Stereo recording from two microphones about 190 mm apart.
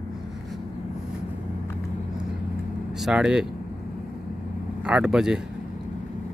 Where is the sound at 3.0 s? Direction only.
5° right (ahead or behind).